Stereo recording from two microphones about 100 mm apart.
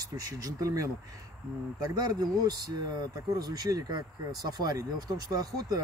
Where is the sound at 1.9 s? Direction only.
40° right (ahead or behind).